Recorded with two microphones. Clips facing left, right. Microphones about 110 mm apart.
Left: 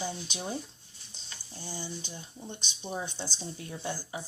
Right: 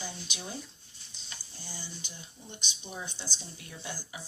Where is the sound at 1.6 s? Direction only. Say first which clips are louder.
Left 7 dB; 25° left (ahead or behind).